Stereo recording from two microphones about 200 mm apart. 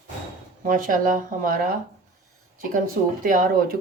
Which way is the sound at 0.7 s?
40° right (ahead or behind).